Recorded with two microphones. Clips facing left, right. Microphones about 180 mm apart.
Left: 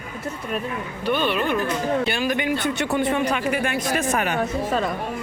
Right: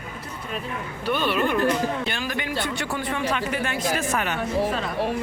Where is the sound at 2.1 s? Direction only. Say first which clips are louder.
Left 6 dB; 15° left (ahead or behind).